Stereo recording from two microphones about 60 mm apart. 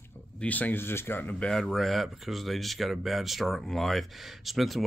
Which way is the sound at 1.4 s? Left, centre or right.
Centre.